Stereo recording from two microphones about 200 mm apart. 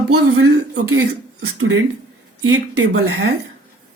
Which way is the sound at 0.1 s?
90° right.